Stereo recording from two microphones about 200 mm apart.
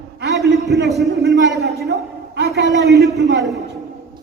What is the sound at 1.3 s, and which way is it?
Speech, 60° right (ahead or behind).